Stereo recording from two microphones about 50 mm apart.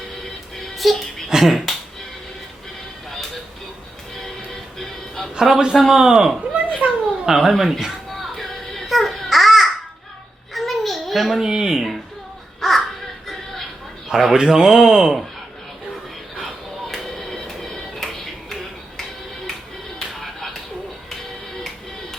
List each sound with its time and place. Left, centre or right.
0.5 s music: centre
1.3 s speech: centre
4.8 s music: centre
5.3 s a man's voice: centre
6.5 s a sound: right
7.3 s music: centre
10.5 s child singing: centre
11.4 s speech: centre
12.5 s a sound: centre
14.1 s speech: centre
16.4 s music: centre